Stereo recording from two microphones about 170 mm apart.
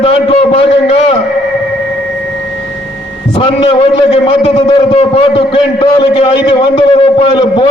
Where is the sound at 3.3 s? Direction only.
30° left (ahead or behind).